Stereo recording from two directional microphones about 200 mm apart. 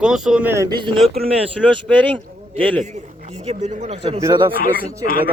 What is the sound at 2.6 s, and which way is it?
A man's voice, 30° right (ahead or behind).